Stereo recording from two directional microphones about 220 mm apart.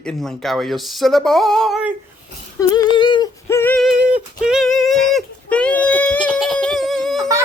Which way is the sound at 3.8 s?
Centre (ahead or behind).